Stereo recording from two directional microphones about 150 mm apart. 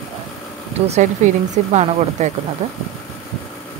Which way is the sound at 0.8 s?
45° right (ahead or behind).